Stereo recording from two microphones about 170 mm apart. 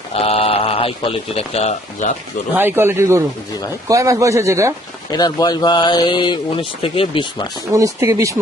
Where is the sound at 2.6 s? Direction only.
15° right (ahead or behind).